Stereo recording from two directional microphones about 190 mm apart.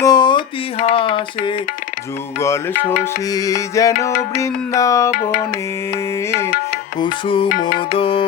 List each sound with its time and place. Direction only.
0.0 s music: 20° left (ahead or behind)
3.0 s music: 20° left (ahead or behind)
7.0 s music: 25° left (ahead or behind)
7.4 s music: 50° left (ahead or behind)
7.9 s music: 30° left (ahead or behind)